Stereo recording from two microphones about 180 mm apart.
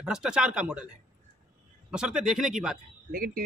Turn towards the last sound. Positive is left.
turn(degrees=-55)  # may be behind; listen again after turning